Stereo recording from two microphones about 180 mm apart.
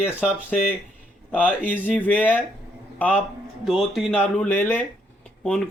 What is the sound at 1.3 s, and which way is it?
A man's voice, 10° left (ahead or behind).